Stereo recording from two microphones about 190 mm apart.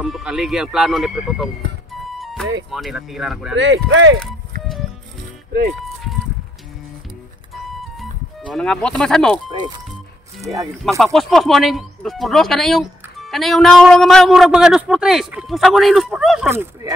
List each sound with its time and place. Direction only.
0.0 s speech: 5° right (ahead or behind)
2.1 s music: centre (ahead or behind)
2.7 s speech: centre (ahead or behind)
3.5 s speech: 70° right (ahead or behind)
7.8 s music: centre (ahead or behind)
9.5 s speech: 25° right (ahead or behind)
10.8 s speech: centre (ahead or behind)
16.4 s speech: 15° right (ahead or behind)